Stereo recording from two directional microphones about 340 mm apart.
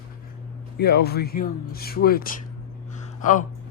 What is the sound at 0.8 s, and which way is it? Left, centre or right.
Speech, left.